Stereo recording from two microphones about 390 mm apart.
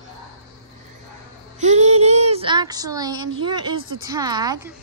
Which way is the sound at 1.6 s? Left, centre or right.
Centre.